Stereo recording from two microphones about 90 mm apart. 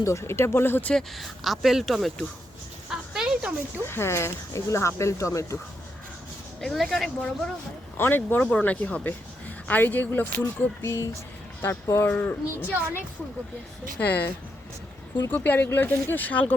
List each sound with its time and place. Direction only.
0.0 s speech: 35° left (ahead or behind)
0.9 s speech: 5° left (ahead or behind)
2.9 s a sound: 5° right (ahead or behind)
3.8 s speech: 30° left (ahead or behind)
6.6 s speech: 5° left (ahead or behind)
7.9 s speech: 25° left (ahead or behind)
14.0 s speech: 20° left (ahead or behind)
15.3 s speech: 20° left (ahead or behind)